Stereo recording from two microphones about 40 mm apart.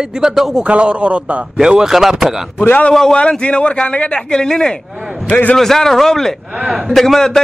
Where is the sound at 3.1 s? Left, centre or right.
Left.